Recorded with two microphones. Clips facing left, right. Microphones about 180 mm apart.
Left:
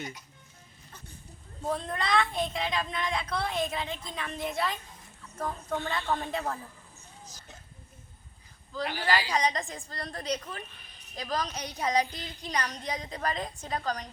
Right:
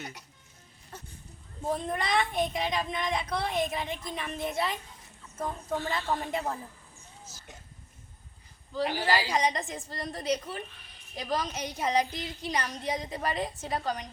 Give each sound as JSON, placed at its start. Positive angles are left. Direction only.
{"t": 1.6, "sound": "a woman's voice", "side_deg": -15}
{"t": 5.6, "sound": "speech", "side_deg": -5}
{"t": 6.3, "sound": "a woman's voice", "side_deg": -15}
{"t": 9.0, "sound": "a woman's voice", "side_deg": -20}